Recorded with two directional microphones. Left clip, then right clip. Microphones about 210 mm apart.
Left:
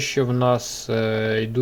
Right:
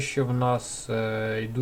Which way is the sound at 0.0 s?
30° left (ahead or behind).